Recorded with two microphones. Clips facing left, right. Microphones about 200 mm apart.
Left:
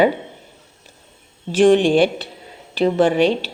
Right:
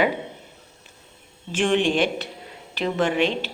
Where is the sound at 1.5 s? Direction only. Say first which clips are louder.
Left 8 dB; 35° left (ahead or behind).